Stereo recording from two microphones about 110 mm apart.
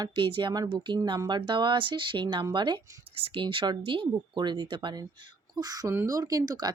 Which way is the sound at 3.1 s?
55° right (ahead or behind).